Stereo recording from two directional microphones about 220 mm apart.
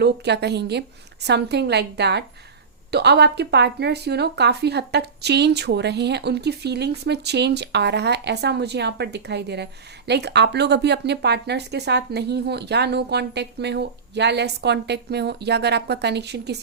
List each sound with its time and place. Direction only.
0.0 s speech: 50° right (ahead or behind)